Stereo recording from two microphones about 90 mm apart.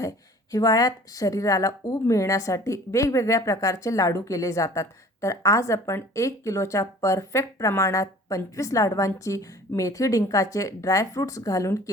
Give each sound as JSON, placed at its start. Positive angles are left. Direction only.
{"t": 0.5, "sound": "speech", "side_deg": 40}